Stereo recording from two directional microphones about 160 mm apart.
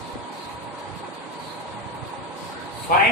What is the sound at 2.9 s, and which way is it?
Speech, 55° left (ahead or behind).